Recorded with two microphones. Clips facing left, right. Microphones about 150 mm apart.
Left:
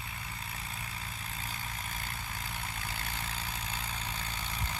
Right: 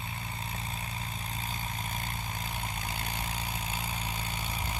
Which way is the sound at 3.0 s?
15° right (ahead or behind).